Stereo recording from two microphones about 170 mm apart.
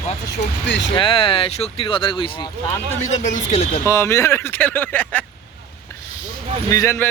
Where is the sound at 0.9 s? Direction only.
30° left (ahead or behind).